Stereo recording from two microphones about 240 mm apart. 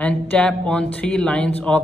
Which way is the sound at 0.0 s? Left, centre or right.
Centre.